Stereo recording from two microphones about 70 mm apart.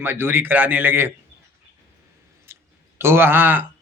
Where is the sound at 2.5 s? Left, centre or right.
Right.